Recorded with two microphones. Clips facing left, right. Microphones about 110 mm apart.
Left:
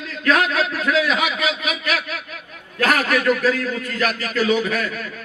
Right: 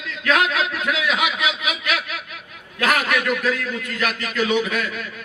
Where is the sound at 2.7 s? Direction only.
40° left (ahead or behind).